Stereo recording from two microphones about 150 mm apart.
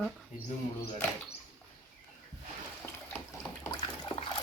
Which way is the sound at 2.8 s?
10° left (ahead or behind).